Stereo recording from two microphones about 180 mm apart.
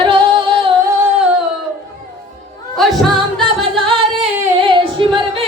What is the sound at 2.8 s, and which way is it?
Music, centre (ahead or behind).